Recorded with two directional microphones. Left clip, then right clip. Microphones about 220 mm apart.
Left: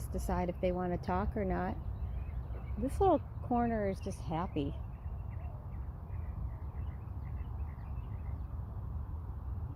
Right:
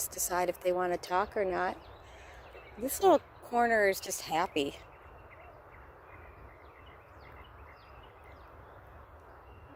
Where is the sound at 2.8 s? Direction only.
40° right (ahead or behind).